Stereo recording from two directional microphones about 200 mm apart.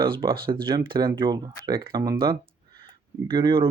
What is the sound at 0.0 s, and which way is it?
Speech, 25° right (ahead or behind).